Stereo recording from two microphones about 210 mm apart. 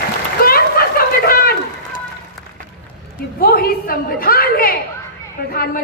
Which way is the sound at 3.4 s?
45° left (ahead or behind).